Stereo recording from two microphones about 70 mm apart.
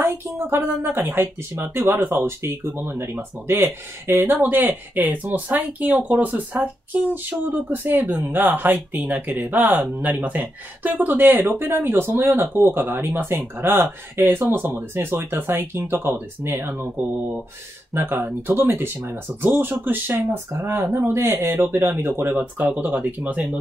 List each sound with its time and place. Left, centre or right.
0.0 s speech: right
17.9 s speech: right